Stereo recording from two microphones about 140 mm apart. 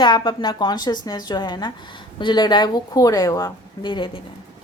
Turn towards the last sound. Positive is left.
turn(degrees=35)  # may be behind; listen again after turning